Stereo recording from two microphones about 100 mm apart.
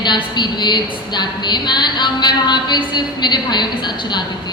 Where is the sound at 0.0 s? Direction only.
45° left (ahead or behind).